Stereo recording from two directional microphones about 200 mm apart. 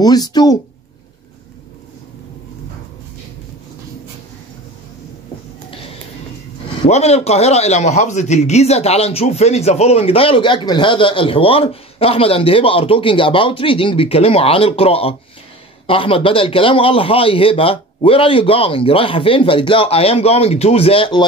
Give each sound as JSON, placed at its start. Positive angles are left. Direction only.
{"t": 0.0, "sound": "a man's voice", "side_deg": 20}
{"t": 6.9, "sound": "a man's voice", "side_deg": 30}